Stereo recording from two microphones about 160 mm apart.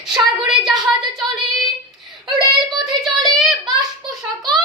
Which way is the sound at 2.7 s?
Centre (ahead or behind).